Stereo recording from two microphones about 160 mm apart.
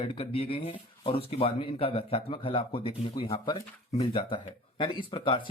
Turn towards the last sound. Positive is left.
turn(degrees=30)  # may be behind; listen again after turning